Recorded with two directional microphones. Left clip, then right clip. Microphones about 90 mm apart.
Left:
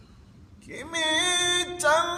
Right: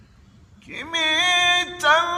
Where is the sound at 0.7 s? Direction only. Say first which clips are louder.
Right 5 dB; 35° left (ahead or behind).